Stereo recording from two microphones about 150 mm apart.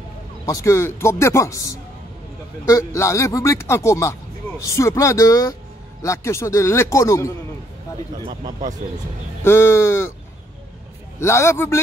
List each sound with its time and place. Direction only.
0.5 s speech: 20° left (ahead or behind)
9.4 s speech: 15° left (ahead or behind)
11.1 s speech: 20° left (ahead or behind)